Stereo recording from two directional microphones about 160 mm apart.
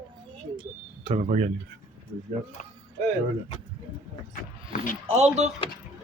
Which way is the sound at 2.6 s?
50° left (ahead or behind).